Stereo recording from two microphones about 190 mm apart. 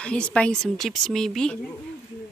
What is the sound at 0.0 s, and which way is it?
Speech, 5° left (ahead or behind).